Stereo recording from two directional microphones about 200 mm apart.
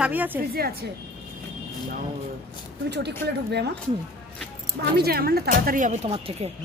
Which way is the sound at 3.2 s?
55° right (ahead or behind).